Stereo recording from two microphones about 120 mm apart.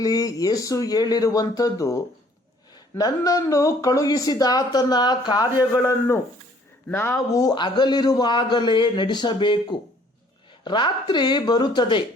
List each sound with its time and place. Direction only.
0.0 s a man's voice: 30° left (ahead or behind)
3.0 s a man's voice: 30° left (ahead or behind)
5.7 s a man's voice: 20° left (ahead or behind); by 12.0 s 40° left (ahead or behind)